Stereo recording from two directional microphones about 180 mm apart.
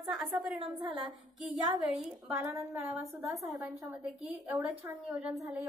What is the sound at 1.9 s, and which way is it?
A woman's voice, 5° right (ahead or behind).